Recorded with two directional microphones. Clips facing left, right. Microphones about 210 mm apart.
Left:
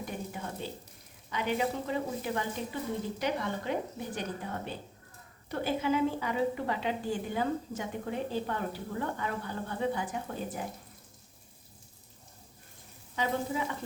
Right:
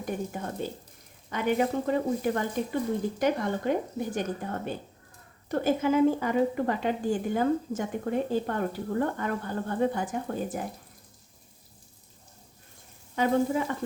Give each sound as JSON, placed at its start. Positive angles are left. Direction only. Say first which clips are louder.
{"t": 0.0, "sound": "a woman's voice", "louder": "right 5 dB", "side_deg": -45}
{"t": 13.1, "sound": "a woman's voice", "louder": "right 7 dB", "side_deg": -50}